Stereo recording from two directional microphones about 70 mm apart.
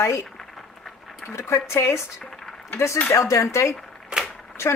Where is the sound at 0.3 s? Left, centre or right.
Centre.